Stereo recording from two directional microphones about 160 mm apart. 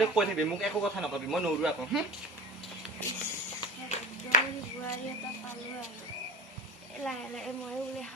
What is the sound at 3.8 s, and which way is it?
Clapping, 45° left (ahead or behind).